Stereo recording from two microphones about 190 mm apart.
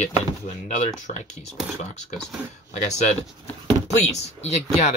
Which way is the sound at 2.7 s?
35° left (ahead or behind).